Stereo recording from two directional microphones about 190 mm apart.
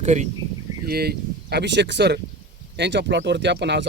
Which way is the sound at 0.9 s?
55° right (ahead or behind).